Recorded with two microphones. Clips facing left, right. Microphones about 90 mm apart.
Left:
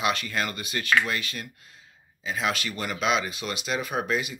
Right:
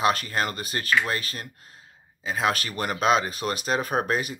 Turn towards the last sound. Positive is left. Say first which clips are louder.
# right 2 dB
turn(degrees=-40)  # may be behind; listen again after turning